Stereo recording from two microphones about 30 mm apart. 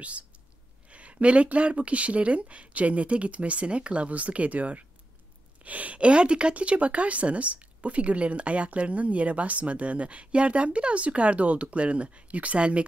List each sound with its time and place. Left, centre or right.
0.8 s speech: right
6.5 s speech: right